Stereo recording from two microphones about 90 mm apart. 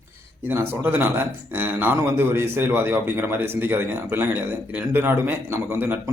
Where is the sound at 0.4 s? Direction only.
25° right (ahead or behind).